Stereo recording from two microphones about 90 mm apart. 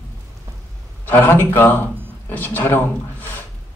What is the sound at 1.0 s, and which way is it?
Speech, 20° left (ahead or behind).